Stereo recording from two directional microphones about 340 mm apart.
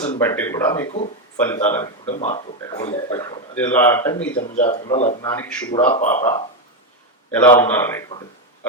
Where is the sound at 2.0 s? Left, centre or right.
Centre.